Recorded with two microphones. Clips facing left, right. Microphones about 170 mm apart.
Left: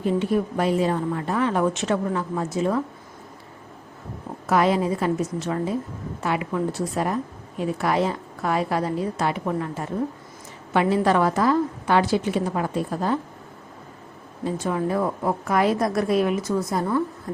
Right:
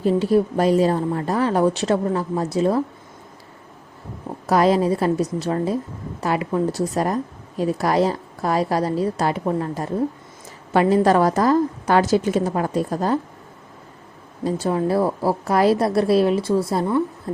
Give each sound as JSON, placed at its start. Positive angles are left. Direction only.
{"t": 0.0, "sound": "a woman's voice", "side_deg": -35}
{"t": 4.4, "sound": "a woman's voice", "side_deg": -35}
{"t": 14.4, "sound": "a woman's voice", "side_deg": -35}
{"t": 17.3, "sound": "music", "side_deg": -30}